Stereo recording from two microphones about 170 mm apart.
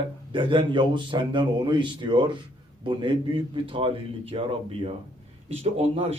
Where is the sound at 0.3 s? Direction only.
30° right (ahead or behind).